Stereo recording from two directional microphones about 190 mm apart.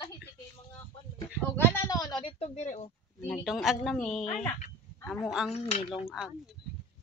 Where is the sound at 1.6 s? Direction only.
15° left (ahead or behind); by 2.9 s 35° left (ahead or behind).